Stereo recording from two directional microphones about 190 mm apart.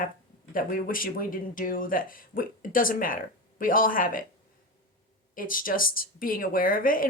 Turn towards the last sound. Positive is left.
turn(degrees=45)  # may be behind; listen again after turning